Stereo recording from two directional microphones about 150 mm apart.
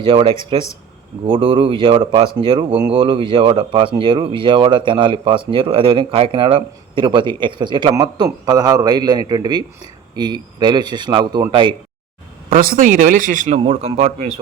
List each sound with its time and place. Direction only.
0.0 s speech: 35° right (ahead or behind)
12.5 s a man's voice: 70° right (ahead or behind)
13.6 s speech: 45° right (ahead or behind)